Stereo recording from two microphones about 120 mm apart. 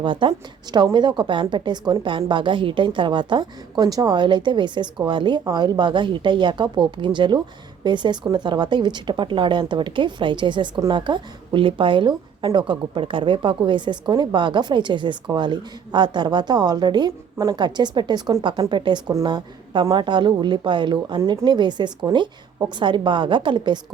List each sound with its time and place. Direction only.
0.0 s a woman's voice: 45° right (ahead or behind)